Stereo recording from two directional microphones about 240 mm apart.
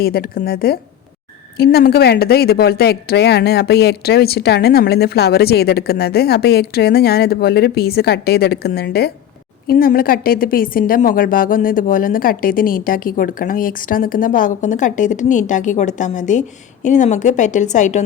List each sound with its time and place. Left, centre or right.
0.0 s a woman's voice: left